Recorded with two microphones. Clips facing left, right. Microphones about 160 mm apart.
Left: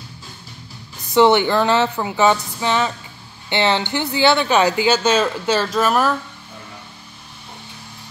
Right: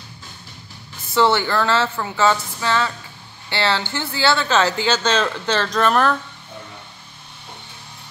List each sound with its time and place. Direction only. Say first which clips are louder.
1.1 s speech: left 4 dB; 20° left (ahead or behind)